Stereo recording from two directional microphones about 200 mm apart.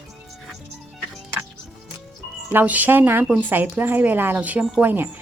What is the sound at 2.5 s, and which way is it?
Speech, 10° right (ahead or behind).